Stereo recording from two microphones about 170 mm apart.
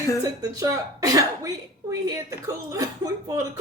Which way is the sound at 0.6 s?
20° right (ahead or behind).